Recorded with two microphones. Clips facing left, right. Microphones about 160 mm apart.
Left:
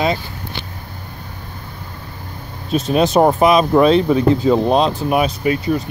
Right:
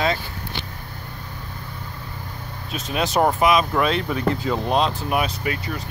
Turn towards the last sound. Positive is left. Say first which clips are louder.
# left 9 dB
turn(degrees=25)  # may be behind; listen again after turning